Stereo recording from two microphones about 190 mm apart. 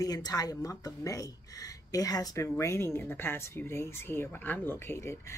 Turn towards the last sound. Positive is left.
turn(degrees=15)  # may be behind; listen again after turning